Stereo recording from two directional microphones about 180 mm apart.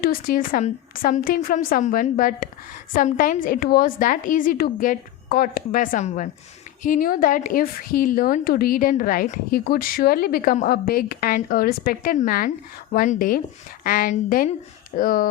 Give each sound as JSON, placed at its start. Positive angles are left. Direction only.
{"t": 0.0, "sound": "a woman's voice", "side_deg": 55}